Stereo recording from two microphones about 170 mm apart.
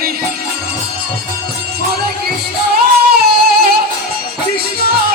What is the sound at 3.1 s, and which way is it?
Music, 65° right (ahead or behind).